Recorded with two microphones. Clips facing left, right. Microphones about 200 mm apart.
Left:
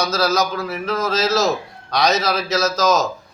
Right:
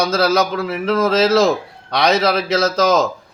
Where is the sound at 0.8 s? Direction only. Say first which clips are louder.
Right 6 dB; 55° right (ahead or behind).